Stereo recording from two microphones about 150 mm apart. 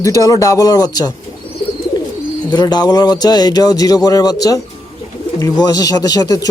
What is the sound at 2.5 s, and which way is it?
A man's voice, 25° left (ahead or behind).